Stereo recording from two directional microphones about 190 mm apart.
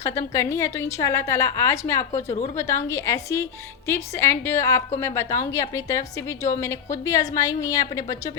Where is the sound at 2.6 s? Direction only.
15° left (ahead or behind).